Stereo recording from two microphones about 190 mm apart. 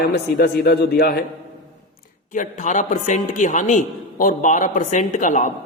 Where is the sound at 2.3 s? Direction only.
40° left (ahead or behind).